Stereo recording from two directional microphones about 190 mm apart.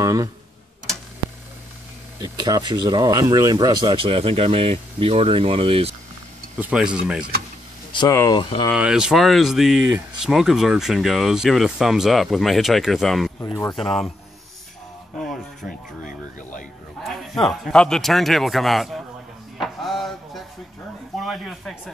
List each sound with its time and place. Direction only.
0.0 s speech: 15° right (ahead or behind)
2.1 s speech: 20° right (ahead or behind)
6.6 s speech: 5° right (ahead or behind)
7.9 s speech: 25° left (ahead or behind)
8.7 s speech: 5° right (ahead or behind)
9.8 s speech: 15° right (ahead or behind)
10.3 s speech: centre (ahead or behind)
13.4 s speech: 15° left (ahead or behind)
13.7 s speech: centre (ahead or behind)
15.1 s music: centre (ahead or behind)
17.0 s speech: centre (ahead or behind)
19.6 s a sound: centre (ahead or behind)
21.2 s speech: centre (ahead or behind)